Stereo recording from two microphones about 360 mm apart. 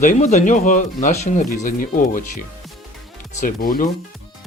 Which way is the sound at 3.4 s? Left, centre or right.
Left.